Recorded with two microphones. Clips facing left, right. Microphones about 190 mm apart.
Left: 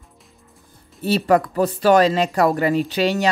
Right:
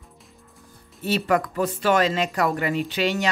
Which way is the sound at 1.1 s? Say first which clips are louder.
Left 5 dB; 35° left (ahead or behind).